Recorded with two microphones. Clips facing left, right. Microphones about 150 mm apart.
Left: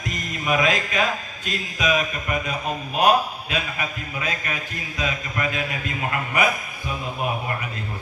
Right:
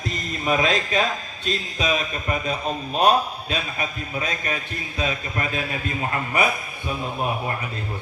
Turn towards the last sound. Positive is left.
turn(degrees=-30)  # may be behind; listen again after turning